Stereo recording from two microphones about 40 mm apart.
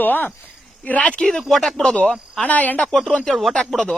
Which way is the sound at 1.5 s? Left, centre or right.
Centre.